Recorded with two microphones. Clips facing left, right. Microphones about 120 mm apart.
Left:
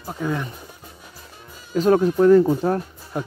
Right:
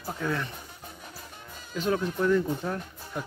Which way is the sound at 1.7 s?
40° left (ahead or behind).